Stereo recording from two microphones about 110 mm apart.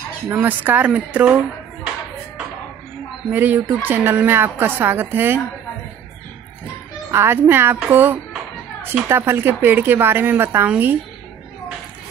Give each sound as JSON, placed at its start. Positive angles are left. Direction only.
{"t": 0.3, "sound": "speech", "side_deg": -15}
{"t": 3.3, "sound": "speech", "side_deg": -20}
{"t": 7.1, "sound": "speech", "side_deg": -20}